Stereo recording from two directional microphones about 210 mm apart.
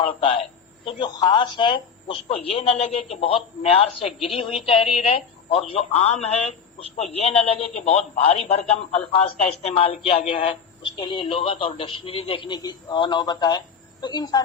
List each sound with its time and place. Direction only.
0.0 s a woman's voice: 25° left (ahead or behind)